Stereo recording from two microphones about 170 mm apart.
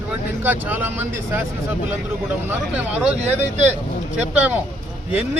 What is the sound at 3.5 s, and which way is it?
Speech, 40° right (ahead or behind).